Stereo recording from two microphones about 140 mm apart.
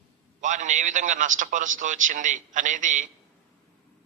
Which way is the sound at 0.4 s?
60° right (ahead or behind).